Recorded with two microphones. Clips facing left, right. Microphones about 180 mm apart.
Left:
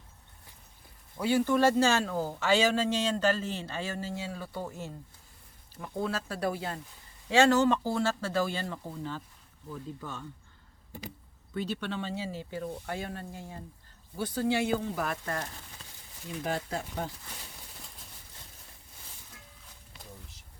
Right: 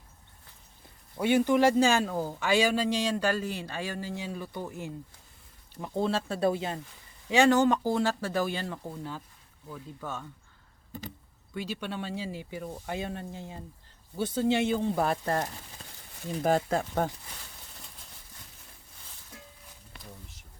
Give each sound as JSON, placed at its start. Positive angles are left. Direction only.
{"t": 1.1, "sound": "speech", "side_deg": -20}
{"t": 5.8, "sound": "speech", "side_deg": -25}
{"t": 11.5, "sound": "speech", "side_deg": -10}
{"t": 16.3, "sound": "speech", "side_deg": -45}